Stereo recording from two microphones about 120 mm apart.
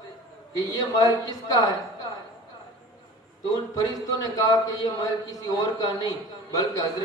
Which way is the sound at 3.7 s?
30° left (ahead or behind).